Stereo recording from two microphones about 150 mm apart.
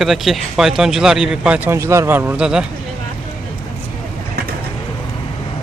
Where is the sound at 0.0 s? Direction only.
Centre (ahead or behind).